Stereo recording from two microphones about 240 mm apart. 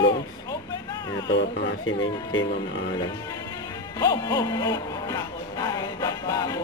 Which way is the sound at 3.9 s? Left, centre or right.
Centre.